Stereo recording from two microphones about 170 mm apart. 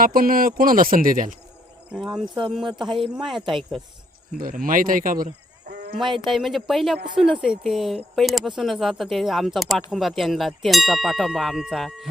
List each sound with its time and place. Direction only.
0.0 s speech: 55° right (ahead or behind)
1.9 s speech: 5° right (ahead or behind)
4.4 s speech: 55° right (ahead or behind)
6.0 s speech: 30° right (ahead or behind)
6.2 s speech: centre (ahead or behind)